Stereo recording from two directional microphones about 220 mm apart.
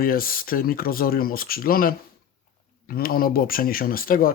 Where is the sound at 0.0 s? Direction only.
40° left (ahead or behind).